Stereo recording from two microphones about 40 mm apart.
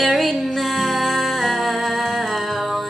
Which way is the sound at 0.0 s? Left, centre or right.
Centre.